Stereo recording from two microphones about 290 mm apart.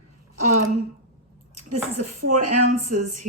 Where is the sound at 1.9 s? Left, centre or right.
Right.